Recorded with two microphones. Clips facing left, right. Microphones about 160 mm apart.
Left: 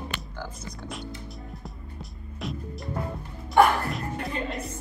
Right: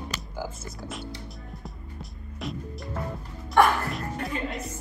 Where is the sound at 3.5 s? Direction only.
Centre (ahead or behind).